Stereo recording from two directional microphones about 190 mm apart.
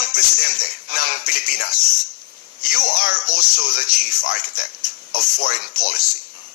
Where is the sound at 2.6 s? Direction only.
50° left (ahead or behind).